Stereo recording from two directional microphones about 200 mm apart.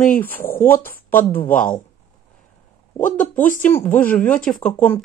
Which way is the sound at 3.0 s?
40° left (ahead or behind).